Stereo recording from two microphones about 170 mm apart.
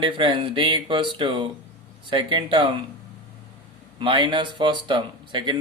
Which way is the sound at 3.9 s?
30° right (ahead or behind).